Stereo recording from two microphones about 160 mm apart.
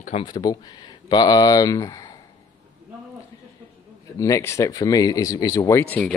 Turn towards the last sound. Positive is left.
turn(degrees=10)  # may be behind; listen again after turning